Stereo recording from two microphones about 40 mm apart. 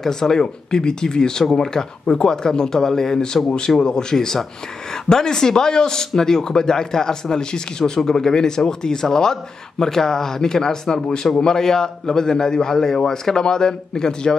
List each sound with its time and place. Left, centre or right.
0.0 s a man's voice: centre